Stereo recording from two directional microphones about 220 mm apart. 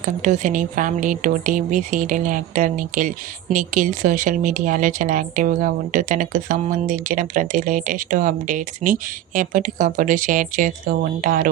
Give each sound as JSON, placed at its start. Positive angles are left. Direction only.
{"t": 0.0, "sound": "speech", "side_deg": -35}